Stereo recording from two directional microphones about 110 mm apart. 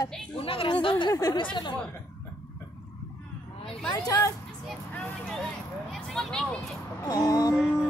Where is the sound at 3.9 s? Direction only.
35° left (ahead or behind).